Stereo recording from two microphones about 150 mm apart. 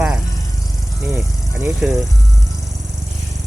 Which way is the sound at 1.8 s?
5° right (ahead or behind).